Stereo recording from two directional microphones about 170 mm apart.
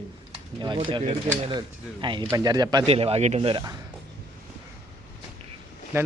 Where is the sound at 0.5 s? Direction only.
30° right (ahead or behind).